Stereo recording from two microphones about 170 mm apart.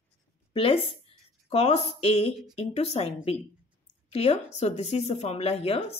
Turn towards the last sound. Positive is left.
turn(degrees=35)  # may be behind; listen again after turning